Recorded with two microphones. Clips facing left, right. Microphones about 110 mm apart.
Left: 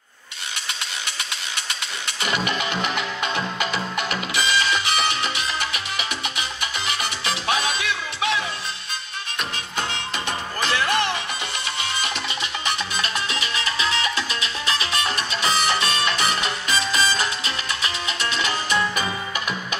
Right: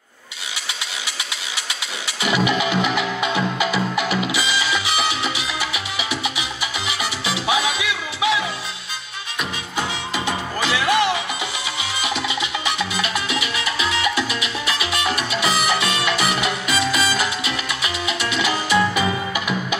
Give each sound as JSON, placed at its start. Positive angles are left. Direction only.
{"t": 3.0, "sound": "music", "side_deg": -10}
{"t": 5.6, "sound": "salsa music", "side_deg": -10}
{"t": 9.4, "sound": "music", "side_deg": -10}